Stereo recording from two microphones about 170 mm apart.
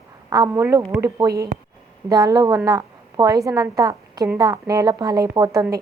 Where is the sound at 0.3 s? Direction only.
20° right (ahead or behind).